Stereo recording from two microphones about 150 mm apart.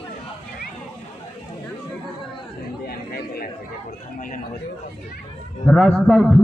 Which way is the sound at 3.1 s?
90° left.